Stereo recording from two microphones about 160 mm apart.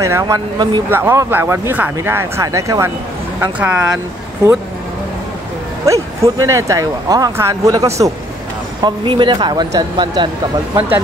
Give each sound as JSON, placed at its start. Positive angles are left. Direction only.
{"t": 0.0, "sound": "speech", "side_deg": -20}
{"t": 5.9, "sound": "speech", "side_deg": -20}